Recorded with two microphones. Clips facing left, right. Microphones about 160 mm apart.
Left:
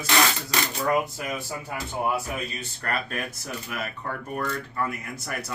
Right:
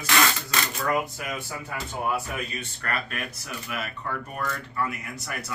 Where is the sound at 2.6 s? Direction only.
35° left (ahead or behind).